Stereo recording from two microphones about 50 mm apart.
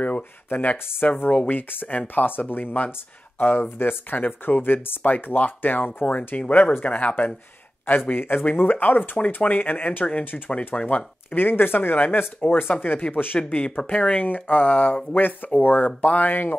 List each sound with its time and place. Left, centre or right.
0.0 s speech: left
1.5 s speech: left
1.9 s speech: left
8.1 s speech: left
10.0 s speech: left
11.3 s speech: left
13.4 s speech: left
14.2 s speech: left